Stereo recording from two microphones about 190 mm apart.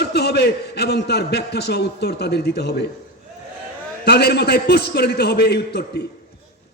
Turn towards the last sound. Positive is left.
turn(degrees=60)  # may be behind; listen again after turning